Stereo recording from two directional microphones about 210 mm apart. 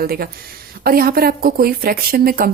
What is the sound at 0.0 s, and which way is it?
A woman's voice, 45° right (ahead or behind).